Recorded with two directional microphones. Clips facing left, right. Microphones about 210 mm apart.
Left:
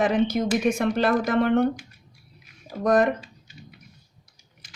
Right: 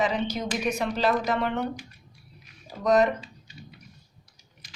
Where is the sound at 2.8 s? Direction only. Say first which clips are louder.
Left 1 dB; 50° left (ahead or behind).